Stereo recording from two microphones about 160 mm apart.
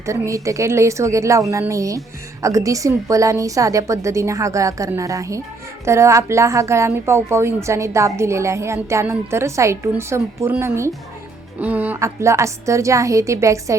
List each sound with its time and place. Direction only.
0.0 s a woman's voice: 20° right (ahead or behind)